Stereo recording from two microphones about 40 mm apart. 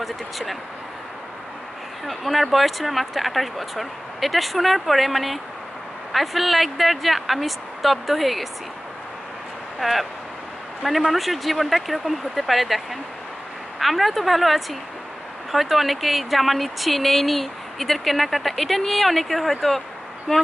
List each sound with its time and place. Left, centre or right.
0.0 s speech: centre
2.0 s speech: centre
9.8 s speech: centre
11.1 s speech: centre
20.3 s speech: left